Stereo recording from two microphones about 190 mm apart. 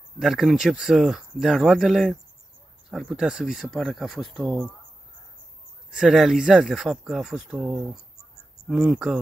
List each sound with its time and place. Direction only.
0.2 s speech: centre (ahead or behind)
5.9 s speech: centre (ahead or behind)